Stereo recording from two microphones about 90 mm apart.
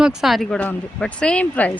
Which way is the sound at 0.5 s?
15° left (ahead or behind).